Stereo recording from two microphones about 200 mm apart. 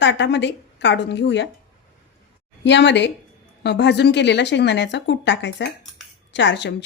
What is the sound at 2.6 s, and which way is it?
Speech, 60° left (ahead or behind).